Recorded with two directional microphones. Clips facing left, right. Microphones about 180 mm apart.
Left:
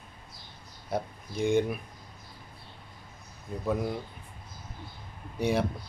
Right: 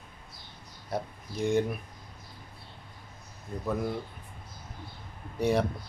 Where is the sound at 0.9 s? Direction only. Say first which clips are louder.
Left 2 dB; centre (ahead or behind).